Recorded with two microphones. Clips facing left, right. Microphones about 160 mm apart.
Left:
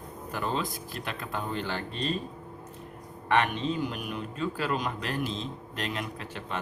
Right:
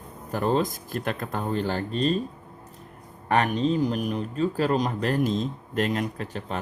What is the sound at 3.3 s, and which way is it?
A man's voice, 40° right (ahead or behind).